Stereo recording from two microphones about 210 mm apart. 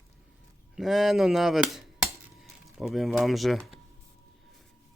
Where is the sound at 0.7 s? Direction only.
Centre (ahead or behind).